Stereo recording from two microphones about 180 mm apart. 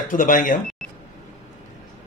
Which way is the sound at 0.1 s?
45° left (ahead or behind).